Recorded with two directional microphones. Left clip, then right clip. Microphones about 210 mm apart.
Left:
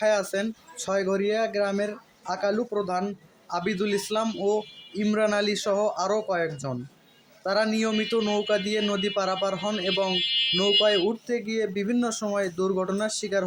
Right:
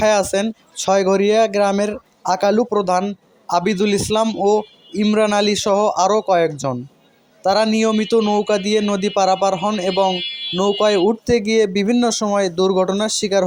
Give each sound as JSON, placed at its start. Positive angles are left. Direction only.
{"t": 0.0, "sound": "speech", "side_deg": -35}